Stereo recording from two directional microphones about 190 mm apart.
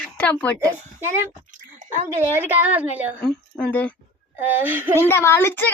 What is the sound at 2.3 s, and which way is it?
Speech, 10° right (ahead or behind).